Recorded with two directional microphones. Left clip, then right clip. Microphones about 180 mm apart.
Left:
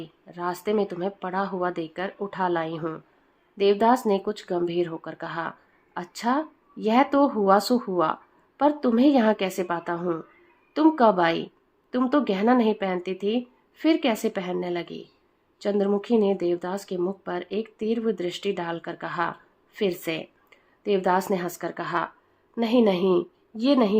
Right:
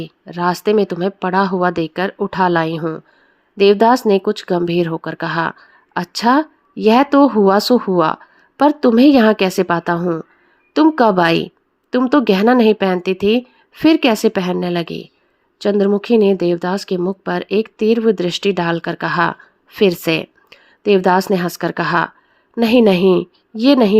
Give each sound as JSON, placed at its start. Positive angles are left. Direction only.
{"t": 0.0, "sound": "speech", "side_deg": -35}
{"t": 10.0, "sound": "a woman's voice", "side_deg": -25}
{"t": 10.9, "sound": "a woman's voice", "side_deg": -40}